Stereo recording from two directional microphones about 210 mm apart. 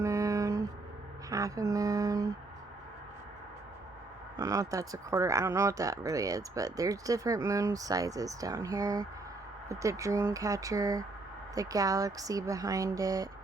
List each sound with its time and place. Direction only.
0.0 s a sound: 15° right (ahead or behind)
1.3 s mantra: 15° right (ahead or behind)
4.4 s speech: 15° right (ahead or behind)